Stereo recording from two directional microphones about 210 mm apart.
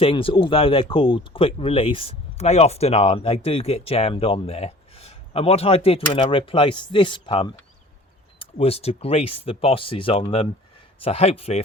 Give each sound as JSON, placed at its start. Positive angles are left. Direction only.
{"t": 0.0, "sound": "speech", "side_deg": 25}